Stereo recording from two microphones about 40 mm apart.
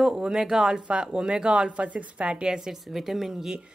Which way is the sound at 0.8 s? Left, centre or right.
Right.